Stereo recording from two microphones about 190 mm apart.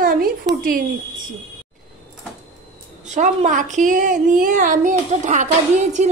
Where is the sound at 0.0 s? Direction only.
50° right (ahead or behind).